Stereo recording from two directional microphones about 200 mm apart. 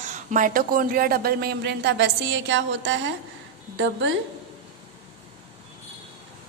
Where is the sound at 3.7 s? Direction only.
65° right (ahead or behind).